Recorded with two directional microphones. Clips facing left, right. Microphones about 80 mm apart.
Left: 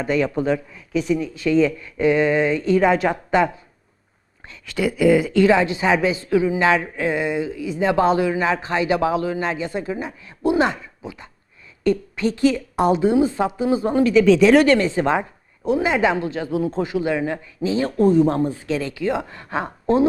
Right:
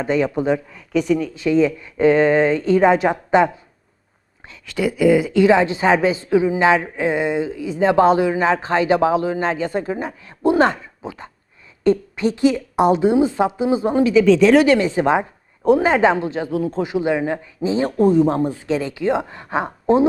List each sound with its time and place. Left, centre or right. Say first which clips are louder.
0.0 s speech: right 2 dB; right
0.7 s speech: right 3 dB; right
1.4 s speech: even; centre
2.0 s speech: right 3 dB; right
4.4 s speech: right 1 dB; centre
5.5 s speech: right 2 dB; right
11.8 s a woman's voice: right 3 dB; right
14.1 s speech: right 1 dB; centre
15.8 s speech: right 3 dB; right
16.5 s speech: even; centre
16.7 s speech: right 2 dB; centre
18.0 s speech: right 1 dB; centre